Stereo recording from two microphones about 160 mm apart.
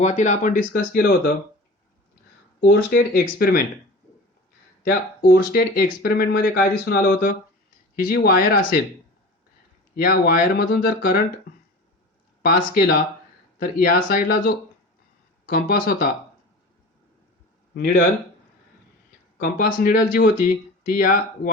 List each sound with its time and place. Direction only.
0.0 s speech: 45° left (ahead or behind); by 1.1 s 65° left (ahead or behind)
2.6 s speech: 75° left (ahead or behind)
4.8 s speech: 70° left (ahead or behind)
9.9 s speech: 70° left (ahead or behind)
12.4 s speech: 65° left (ahead or behind)
19.4 s speech: 60° left (ahead or behind)